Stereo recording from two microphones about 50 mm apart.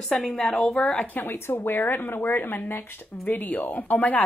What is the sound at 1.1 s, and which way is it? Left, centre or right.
Speech, left.